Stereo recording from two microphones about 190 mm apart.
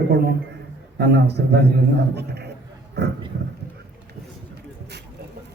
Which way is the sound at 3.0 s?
60° right (ahead or behind).